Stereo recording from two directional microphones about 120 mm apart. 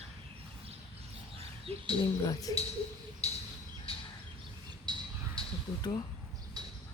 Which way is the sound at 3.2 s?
60° left (ahead or behind).